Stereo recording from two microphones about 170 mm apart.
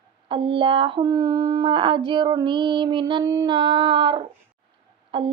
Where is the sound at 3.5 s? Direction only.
25° right (ahead or behind).